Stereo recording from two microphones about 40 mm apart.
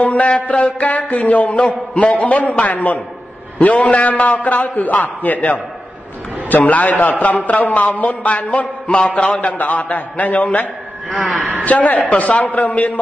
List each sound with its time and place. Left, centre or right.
0.0 s a sound: left
0.7 s a man's voice: left
9.5 s a man's voice: left
11.6 s a man's voice: left